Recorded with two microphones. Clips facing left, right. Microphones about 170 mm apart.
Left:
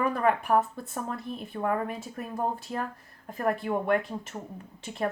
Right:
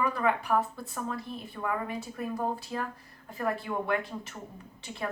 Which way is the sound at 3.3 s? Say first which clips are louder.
Left 4 dB; 50° left (ahead or behind).